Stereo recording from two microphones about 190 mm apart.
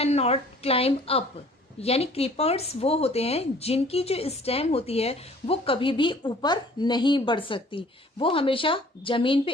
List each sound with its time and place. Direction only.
0.0 s a woman's voice: 35° left (ahead or behind)